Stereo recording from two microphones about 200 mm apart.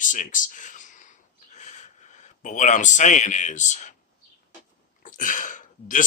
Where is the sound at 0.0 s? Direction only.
40° left (ahead or behind).